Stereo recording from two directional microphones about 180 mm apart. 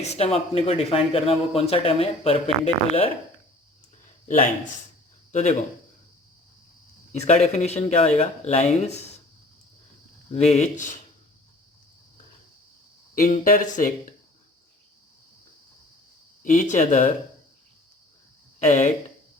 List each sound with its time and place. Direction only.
0.0 s speech: 35° left (ahead or behind)
5.3 s speech: 40° left (ahead or behind)
7.1 s speech: 40° left (ahead or behind)
10.3 s speech: 35° left (ahead or behind)
13.1 s speech: 45° left (ahead or behind)
16.4 s speech: 45° left (ahead or behind)
18.6 s speech: 40° left (ahead or behind)